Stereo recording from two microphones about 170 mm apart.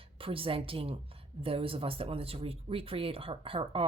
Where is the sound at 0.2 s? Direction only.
30° right (ahead or behind).